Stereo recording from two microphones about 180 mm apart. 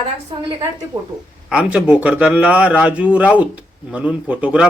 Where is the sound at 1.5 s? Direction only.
5° right (ahead or behind).